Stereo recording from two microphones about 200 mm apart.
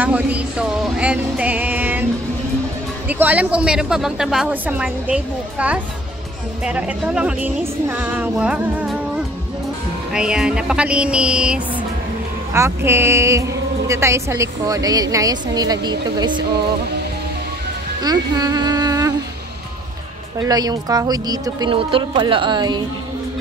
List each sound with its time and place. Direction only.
0.0 s a woman's voice: 5° right (ahead or behind)
3.1 s a woman's voice: 10° right (ahead or behind)
18.0 s speech: 20° right (ahead or behind)
20.4 s speech: 20° right (ahead or behind)